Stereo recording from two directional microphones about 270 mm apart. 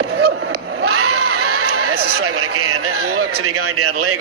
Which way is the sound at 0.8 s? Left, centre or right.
Right.